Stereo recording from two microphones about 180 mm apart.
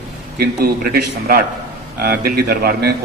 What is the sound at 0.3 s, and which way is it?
A man's voice, 60° right (ahead or behind).